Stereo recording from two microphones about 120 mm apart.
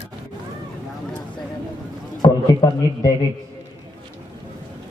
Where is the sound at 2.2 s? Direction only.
35° left (ahead or behind).